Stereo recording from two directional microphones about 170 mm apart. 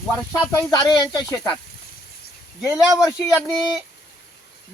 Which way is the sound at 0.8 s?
25° left (ahead or behind).